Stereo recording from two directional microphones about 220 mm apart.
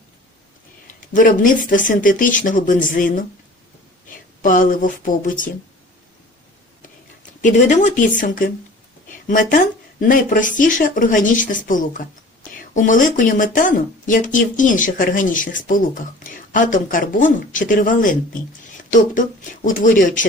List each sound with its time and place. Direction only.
1.1 s speech: 40° left (ahead or behind)
4.4 s speech: 35° left (ahead or behind)
7.4 s speech: 35° left (ahead or behind)
9.0 s a sound: 35° left (ahead or behind)
10.0 s speech: 40° left (ahead or behind)
19.6 s speech: 35° left (ahead or behind)